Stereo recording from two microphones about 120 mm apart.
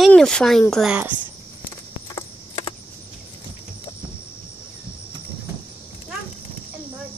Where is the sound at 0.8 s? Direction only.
10° right (ahead or behind).